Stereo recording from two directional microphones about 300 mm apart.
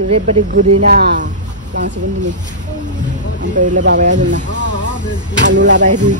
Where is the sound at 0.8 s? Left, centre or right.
Right.